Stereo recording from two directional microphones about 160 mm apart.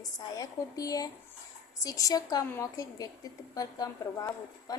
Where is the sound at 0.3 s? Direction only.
20° left (ahead or behind).